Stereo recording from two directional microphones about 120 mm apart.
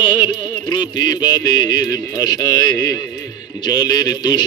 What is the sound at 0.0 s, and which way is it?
A man's voice, 40° left (ahead or behind).